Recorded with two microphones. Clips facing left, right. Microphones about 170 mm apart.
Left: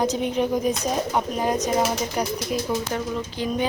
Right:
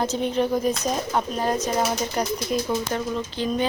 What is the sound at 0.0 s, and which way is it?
Speech, 10° left (ahead or behind).